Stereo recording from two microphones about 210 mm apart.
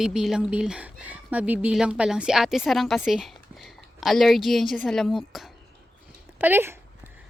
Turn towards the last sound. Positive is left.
turn(degrees=-10)  # may be behind; listen again after turning